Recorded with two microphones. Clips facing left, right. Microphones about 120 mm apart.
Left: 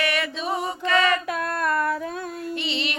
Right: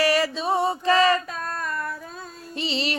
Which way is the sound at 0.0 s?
35° right (ahead or behind).